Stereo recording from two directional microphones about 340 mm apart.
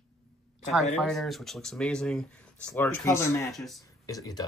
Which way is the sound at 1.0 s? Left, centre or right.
Centre.